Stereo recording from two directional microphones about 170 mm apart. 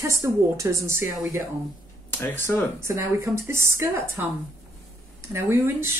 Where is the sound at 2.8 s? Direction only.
15° right (ahead or behind).